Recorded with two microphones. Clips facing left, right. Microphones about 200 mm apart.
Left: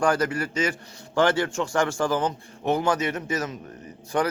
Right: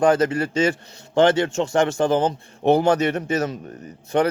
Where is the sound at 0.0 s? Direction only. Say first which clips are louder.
Right 5 dB; 25° right (ahead or behind).